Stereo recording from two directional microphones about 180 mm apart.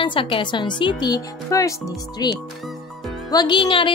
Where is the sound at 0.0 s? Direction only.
30° left (ahead or behind).